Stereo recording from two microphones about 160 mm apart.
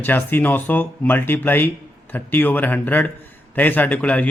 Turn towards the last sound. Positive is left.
turn(degrees=10)  # may be behind; listen again after turning